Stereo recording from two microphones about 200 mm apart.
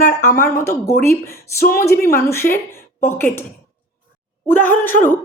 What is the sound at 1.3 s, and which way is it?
Speech, 50° left (ahead or behind).